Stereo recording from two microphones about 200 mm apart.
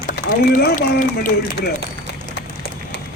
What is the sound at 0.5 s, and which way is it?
A man's voice, 45° left (ahead or behind).